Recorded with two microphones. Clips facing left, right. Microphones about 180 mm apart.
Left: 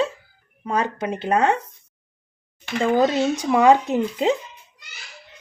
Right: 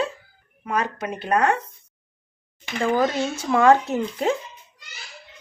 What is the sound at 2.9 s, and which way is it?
Speech, 15° left (ahead or behind).